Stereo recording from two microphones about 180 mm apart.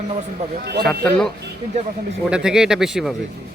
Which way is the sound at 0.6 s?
65° right (ahead or behind).